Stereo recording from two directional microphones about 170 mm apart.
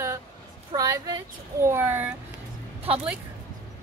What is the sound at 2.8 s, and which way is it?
Speech, 35° right (ahead or behind).